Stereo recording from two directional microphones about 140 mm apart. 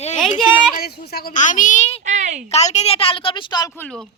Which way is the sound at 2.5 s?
50° left (ahead or behind).